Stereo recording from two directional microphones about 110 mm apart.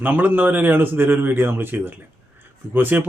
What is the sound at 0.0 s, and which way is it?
Speech, 15° right (ahead or behind).